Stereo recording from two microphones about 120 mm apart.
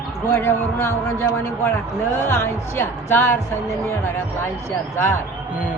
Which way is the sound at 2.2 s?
20° left (ahead or behind).